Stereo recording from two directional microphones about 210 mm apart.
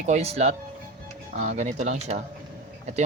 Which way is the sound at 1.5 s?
35° right (ahead or behind).